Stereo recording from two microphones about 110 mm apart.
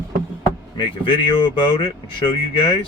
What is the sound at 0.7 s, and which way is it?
Speech, 45° left (ahead or behind).